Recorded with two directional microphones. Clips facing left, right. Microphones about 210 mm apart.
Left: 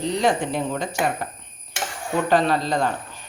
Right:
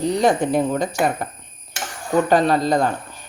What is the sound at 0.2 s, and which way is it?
Speech, 45° right (ahead or behind).